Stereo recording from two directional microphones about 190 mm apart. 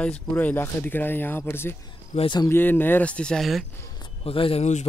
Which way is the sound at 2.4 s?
10° left (ahead or behind).